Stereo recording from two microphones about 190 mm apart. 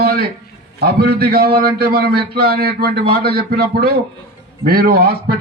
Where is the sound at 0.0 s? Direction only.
55° right (ahead or behind).